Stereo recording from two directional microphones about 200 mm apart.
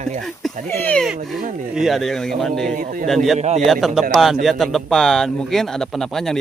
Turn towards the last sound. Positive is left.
turn(degrees=0)  # may be behind; listen again after turning